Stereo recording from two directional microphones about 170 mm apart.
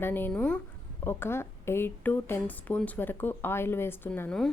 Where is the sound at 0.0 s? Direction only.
10° left (ahead or behind).